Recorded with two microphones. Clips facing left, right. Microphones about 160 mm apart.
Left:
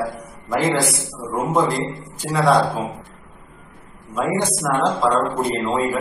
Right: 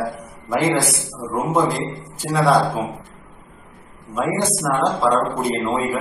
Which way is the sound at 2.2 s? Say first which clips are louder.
Right 1 dB; centre (ahead or behind).